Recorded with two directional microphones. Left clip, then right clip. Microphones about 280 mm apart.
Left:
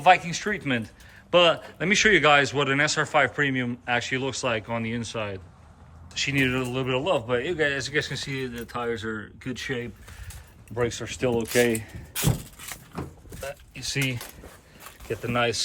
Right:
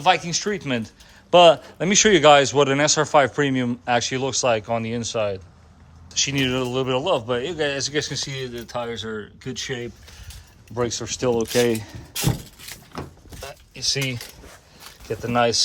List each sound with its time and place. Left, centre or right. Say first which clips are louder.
0.0 s speech: even; centre
11.5 s speech: even; right
13.7 s speech: right 5 dB; centre
15.3 s speech: right 6 dB; centre